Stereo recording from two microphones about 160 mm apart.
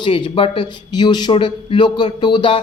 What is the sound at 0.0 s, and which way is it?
Speech, 35° left (ahead or behind).